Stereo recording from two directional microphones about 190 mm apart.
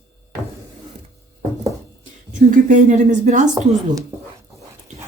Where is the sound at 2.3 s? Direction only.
40° right (ahead or behind).